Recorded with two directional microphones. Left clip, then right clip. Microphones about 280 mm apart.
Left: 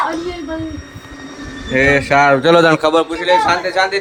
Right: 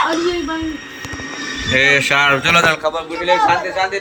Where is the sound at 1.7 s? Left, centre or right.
Centre; by 2.8 s left.